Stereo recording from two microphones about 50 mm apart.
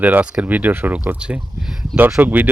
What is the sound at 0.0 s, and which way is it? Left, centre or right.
Speech, right.